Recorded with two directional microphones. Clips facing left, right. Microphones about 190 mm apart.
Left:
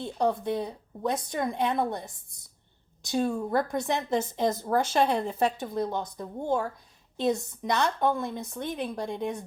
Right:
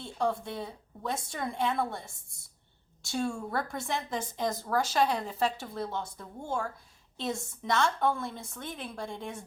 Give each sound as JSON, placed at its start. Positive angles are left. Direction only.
{"t": 0.0, "sound": "a woman's voice", "side_deg": 20}